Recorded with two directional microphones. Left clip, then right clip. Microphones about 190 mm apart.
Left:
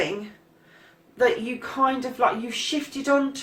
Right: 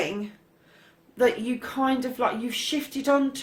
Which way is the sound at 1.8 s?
45° right (ahead or behind).